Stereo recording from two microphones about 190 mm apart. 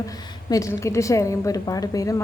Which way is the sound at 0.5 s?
15° left (ahead or behind).